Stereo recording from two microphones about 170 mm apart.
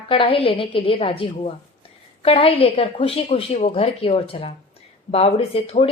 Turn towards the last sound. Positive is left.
turn(degrees=35)  # may be behind; listen again after turning